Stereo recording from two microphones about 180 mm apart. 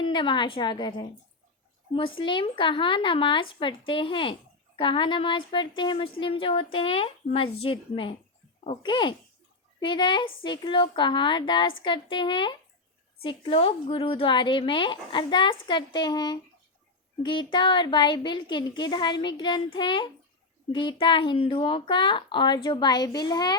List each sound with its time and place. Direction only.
0.0 s speech: 25° left (ahead or behind)